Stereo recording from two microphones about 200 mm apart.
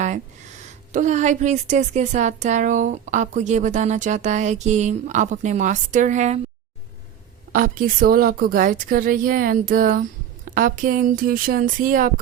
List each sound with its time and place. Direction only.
0.6 s speech: 35° right (ahead or behind)
7.5 s a woman's voice: 45° right (ahead or behind)